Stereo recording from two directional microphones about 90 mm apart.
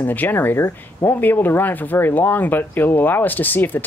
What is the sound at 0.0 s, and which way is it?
Speech, 20° left (ahead or behind).